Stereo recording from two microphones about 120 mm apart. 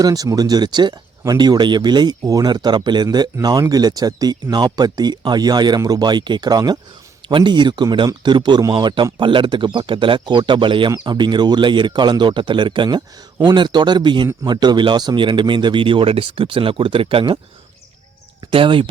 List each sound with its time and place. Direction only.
0.0 s speech: 30° right (ahead or behind); by 17.4 s 45° right (ahead or behind)
18.5 s speech: 45° right (ahead or behind)